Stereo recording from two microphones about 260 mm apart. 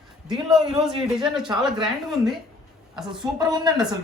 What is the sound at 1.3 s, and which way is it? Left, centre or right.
Speech, centre.